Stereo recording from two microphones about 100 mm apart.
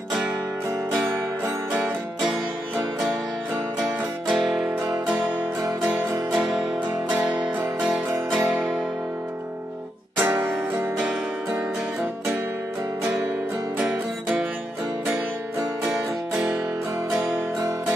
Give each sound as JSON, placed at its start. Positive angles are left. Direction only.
{"t": 3.8, "sound": "music", "side_deg": -5}
{"t": 6.3, "sound": "music", "side_deg": -5}
{"t": 10.1, "sound": "music", "side_deg": -20}
{"t": 13.7, "sound": "music", "side_deg": -15}
{"t": 15.8, "sound": "music", "side_deg": -10}